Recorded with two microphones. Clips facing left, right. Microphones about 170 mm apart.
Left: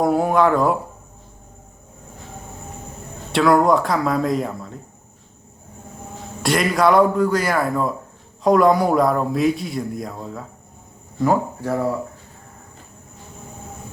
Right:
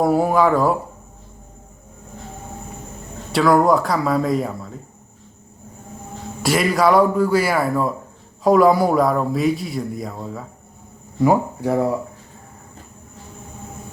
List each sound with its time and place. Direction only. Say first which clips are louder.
0.0 s a man's voice: right 1 dB; centre (ahead or behind)
3.3 s a man's voice: even; centre (ahead or behind)
6.4 s a man's voice: even; centre (ahead or behind)
11.2 s speech: right 2 dB; 15° right (ahead or behind)